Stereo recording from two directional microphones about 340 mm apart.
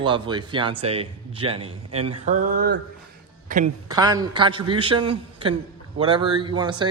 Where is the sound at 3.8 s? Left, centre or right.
Centre.